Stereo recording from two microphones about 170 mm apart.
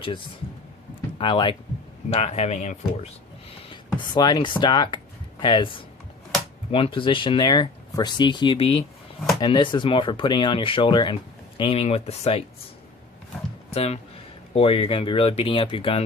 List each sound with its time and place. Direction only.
1.2 s speech: 30° left (ahead or behind)
3.7 s speech: 25° left (ahead or behind)
13.7 s speech: 40° left (ahead or behind)